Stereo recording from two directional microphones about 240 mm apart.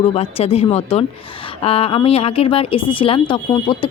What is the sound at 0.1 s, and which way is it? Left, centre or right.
Speech, left.